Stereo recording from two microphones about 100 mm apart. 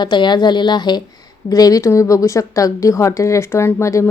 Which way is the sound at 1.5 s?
35° left (ahead or behind).